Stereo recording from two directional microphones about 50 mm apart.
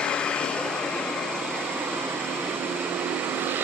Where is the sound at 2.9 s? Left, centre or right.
Right.